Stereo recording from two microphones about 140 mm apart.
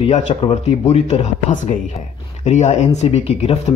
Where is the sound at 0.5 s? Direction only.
55° left (ahead or behind).